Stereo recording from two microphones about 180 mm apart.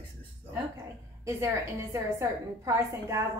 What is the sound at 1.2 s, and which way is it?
A woman's voice, 15° right (ahead or behind).